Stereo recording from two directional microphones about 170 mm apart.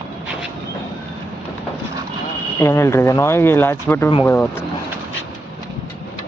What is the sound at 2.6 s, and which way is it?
Speech, 15° left (ahead or behind).